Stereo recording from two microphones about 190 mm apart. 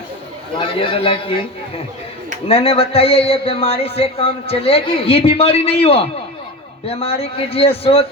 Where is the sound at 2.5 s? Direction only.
30° left (ahead or behind).